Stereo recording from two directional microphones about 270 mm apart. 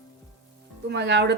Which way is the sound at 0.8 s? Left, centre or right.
Right.